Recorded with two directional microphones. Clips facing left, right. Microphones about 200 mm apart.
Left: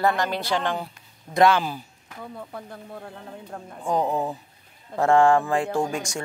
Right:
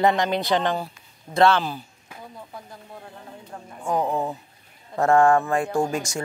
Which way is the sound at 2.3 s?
60° left (ahead or behind).